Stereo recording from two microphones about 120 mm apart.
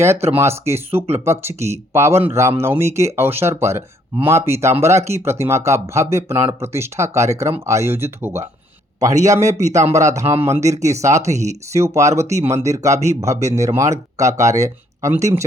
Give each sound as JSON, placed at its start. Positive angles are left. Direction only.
{"t": 0.0, "sound": "speech", "side_deg": -25}
{"t": 11.3, "sound": "speech", "side_deg": -70}
{"t": 11.7, "sound": "speech", "side_deg": -25}